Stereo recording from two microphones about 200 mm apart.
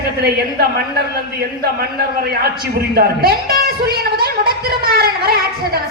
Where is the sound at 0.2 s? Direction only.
50° right (ahead or behind).